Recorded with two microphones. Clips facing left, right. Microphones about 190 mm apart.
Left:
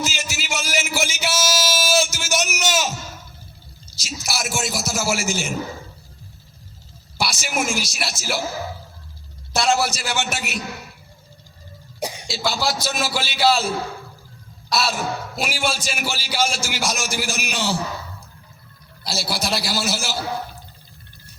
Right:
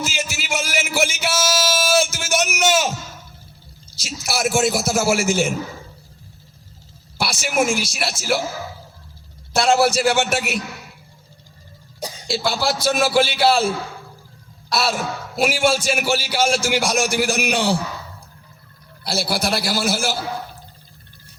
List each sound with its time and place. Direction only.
0.0 s a sound: 55° right (ahead or behind)
3.9 s a sound: 55° right (ahead or behind)
7.2 s a man's voice: 55° right (ahead or behind)
9.6 s a man's voice: 55° right (ahead or behind)
11.9 s cough: 20° left (ahead or behind)
12.3 s a man's voice: 55° right (ahead or behind)
14.7 s a man's voice: 55° right (ahead or behind)
19.0 s a man's voice: 55° right (ahead or behind)